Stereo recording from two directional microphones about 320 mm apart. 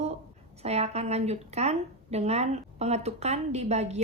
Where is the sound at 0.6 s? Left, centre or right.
Centre.